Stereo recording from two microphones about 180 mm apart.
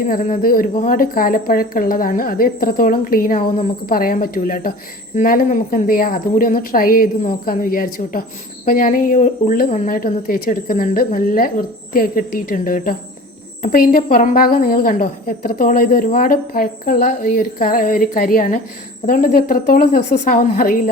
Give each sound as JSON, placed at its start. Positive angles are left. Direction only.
{"t": 0.1, "sound": "a woman's voice", "side_deg": 50}